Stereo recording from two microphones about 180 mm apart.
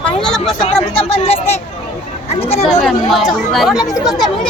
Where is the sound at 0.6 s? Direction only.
35° left (ahead or behind).